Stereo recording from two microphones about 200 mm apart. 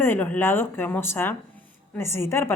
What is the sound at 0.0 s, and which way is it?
Speech, 10° left (ahead or behind).